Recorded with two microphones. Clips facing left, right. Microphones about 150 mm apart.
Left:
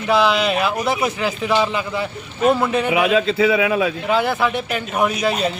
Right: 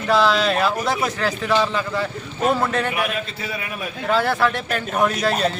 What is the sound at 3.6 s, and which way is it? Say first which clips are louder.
Speech: left 13 dB; 90° left.